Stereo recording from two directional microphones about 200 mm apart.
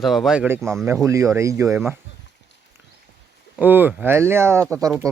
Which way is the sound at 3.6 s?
10° right (ahead or behind).